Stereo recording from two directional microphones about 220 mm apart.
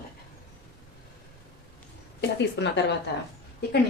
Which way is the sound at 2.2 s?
50° left (ahead or behind).